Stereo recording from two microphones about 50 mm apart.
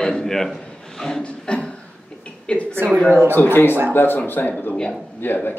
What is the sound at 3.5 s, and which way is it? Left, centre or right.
Speech, left.